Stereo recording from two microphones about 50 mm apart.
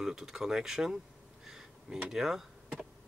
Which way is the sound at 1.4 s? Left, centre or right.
Centre.